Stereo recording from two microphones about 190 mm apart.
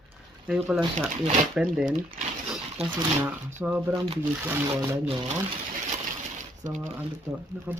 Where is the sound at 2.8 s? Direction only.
30° right (ahead or behind).